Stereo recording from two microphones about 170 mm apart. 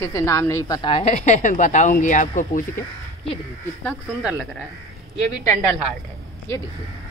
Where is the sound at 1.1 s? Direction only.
45° left (ahead or behind).